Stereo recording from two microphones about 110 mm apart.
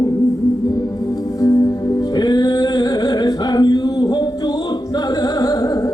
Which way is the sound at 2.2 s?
40° left (ahead or behind).